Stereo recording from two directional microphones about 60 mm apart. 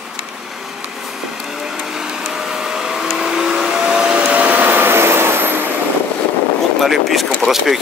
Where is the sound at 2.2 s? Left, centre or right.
Centre; by 5.6 s right.